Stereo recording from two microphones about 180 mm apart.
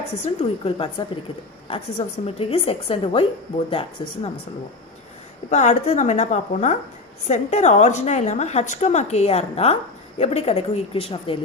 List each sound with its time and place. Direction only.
0.3 s a woman's voice: 30° left (ahead or behind)
5.5 s a woman's voice: 40° left (ahead or behind)